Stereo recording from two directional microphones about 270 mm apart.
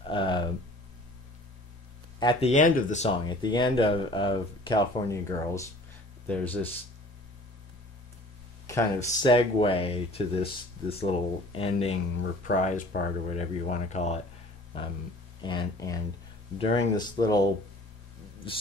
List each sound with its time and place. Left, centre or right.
0.0 s a sound: centre
2.1 s speech: centre
8.6 s speech: centre
15.4 s speech: centre